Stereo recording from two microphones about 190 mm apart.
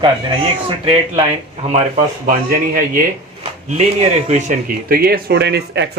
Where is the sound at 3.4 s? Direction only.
35° right (ahead or behind).